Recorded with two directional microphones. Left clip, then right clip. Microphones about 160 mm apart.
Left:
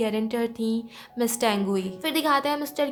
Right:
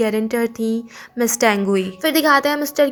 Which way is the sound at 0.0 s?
25° right (ahead or behind).